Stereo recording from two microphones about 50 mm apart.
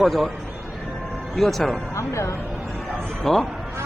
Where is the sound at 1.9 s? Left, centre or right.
Left.